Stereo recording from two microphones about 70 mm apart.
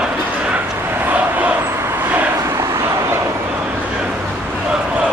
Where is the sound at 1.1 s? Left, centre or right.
Right.